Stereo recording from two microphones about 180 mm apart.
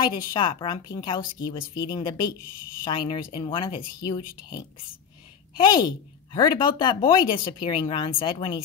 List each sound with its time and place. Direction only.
0.3 s speech: 25° left (ahead or behind)